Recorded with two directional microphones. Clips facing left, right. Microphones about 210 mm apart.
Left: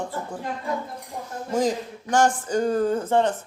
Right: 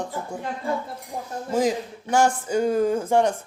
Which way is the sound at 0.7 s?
30° right (ahead or behind).